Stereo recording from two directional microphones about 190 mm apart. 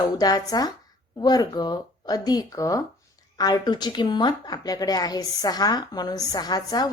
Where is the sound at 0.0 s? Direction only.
20° left (ahead or behind).